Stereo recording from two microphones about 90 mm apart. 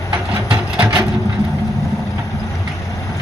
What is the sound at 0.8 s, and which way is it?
Wood, 25° right (ahead or behind).